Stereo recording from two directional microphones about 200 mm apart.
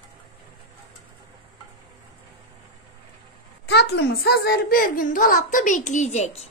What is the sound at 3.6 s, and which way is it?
A child's voice, 55° left (ahead or behind).